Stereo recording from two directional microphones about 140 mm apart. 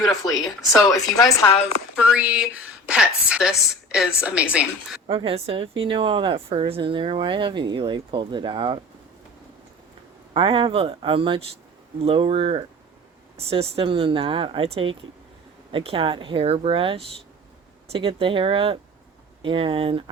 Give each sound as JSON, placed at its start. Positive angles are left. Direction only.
{"t": 0.3, "sound": "speech", "side_deg": 25}
{"t": 2.0, "sound": "a woman's voice", "side_deg": -10}
{"t": 5.0, "sound": "speech", "side_deg": -40}
{"t": 10.3, "sound": "speech", "side_deg": -35}